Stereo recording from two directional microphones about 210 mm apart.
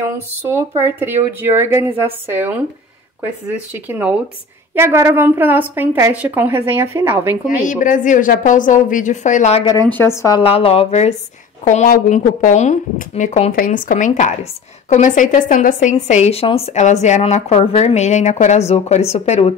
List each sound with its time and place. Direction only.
0.5 s a woman's voice: 10° right (ahead or behind)
3.7 s a woman's voice: 10° right (ahead or behind)
7.6 s speech: 40° left (ahead or behind)
9.9 s a woman's voice: 10° left (ahead or behind); by 19.5 s 30° left (ahead or behind)